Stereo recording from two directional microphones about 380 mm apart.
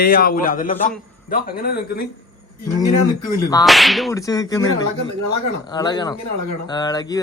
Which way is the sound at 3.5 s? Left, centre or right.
Centre.